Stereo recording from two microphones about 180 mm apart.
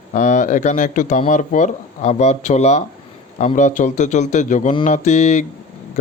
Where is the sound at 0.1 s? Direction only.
45° left (ahead or behind).